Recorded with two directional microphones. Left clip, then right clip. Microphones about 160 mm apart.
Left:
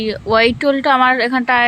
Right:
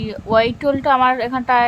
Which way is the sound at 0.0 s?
5° left (ahead or behind).